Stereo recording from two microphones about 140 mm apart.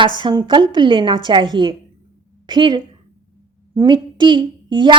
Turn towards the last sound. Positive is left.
turn(degrees=-35)  # may be behind; listen again after turning